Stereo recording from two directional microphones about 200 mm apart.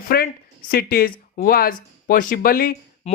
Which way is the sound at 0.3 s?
50° left (ahead or behind).